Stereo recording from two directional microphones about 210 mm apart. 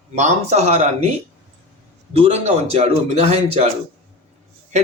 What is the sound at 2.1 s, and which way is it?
Speech, 30° right (ahead or behind).